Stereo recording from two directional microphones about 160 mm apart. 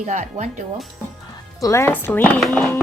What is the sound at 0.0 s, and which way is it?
Speech, 50° right (ahead or behind).